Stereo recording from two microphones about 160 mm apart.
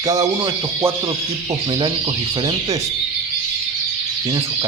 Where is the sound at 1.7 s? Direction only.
30° right (ahead or behind).